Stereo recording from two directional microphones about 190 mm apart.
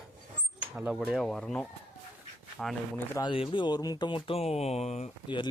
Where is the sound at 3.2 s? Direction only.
25° left (ahead or behind).